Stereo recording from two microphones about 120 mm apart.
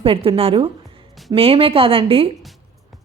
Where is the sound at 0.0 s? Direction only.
50° right (ahead or behind).